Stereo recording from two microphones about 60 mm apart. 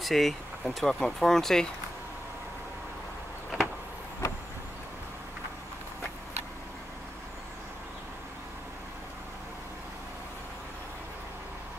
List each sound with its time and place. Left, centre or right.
0.0 s speech: centre
4.2 s vehicle: left